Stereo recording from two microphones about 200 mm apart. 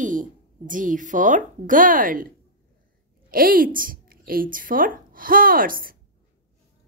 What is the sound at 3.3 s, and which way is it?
Speech, 45° right (ahead or behind).